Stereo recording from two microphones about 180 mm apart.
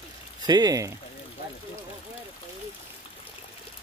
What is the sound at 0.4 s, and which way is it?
Speech, 20° right (ahead or behind).